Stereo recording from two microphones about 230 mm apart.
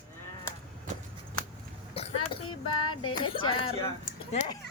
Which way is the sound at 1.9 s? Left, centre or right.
Left.